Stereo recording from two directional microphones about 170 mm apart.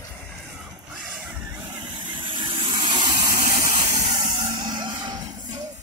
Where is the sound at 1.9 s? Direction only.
30° right (ahead or behind).